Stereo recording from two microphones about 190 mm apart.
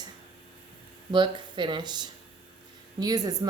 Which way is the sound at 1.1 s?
25° right (ahead or behind).